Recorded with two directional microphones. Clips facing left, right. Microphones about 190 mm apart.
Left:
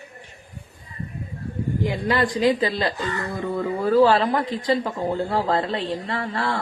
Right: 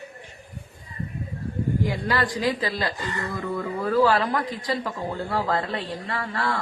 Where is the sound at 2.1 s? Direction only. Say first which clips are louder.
Left 7 dB; 20° left (ahead or behind).